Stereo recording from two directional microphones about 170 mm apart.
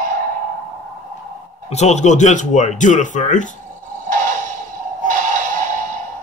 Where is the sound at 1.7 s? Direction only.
40° left (ahead or behind).